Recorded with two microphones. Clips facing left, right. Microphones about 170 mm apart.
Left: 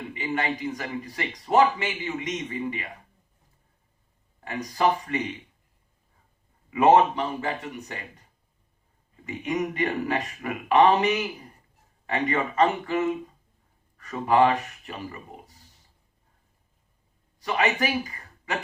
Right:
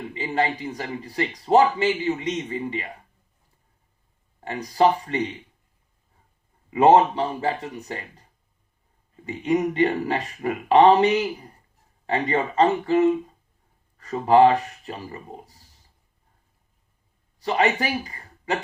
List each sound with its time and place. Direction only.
0.1 s a man's voice: 30° right (ahead or behind)
4.4 s a man's voice: 30° right (ahead or behind)
6.7 s a man's voice: 30° right (ahead or behind)
9.2 s a man's voice: 30° right (ahead or behind)
17.4 s speech: 30° right (ahead or behind)